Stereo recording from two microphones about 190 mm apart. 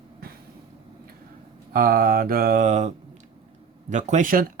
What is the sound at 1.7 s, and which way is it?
Speech, 50° right (ahead or behind).